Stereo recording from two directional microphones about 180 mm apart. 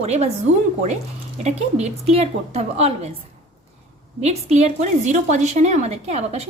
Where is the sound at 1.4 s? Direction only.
35° right (ahead or behind).